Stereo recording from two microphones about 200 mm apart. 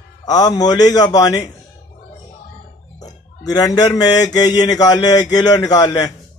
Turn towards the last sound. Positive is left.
turn(degrees=20)  # may be behind; listen again after turning